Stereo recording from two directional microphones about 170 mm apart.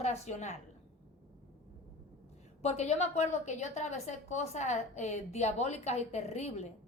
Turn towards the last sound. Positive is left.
turn(degrees=40)  # may be behind; listen again after turning